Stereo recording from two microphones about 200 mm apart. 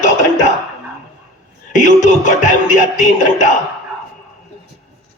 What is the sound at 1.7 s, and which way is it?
Speech, 35° left (ahead or behind).